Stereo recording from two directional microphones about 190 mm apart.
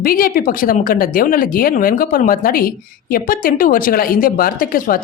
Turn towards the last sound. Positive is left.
turn(degrees=50)  # may be behind; listen again after turning